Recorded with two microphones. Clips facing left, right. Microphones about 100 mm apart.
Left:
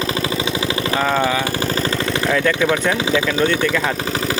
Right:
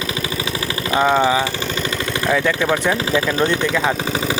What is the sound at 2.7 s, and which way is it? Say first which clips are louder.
Speech: even; 20° right (ahead or behind).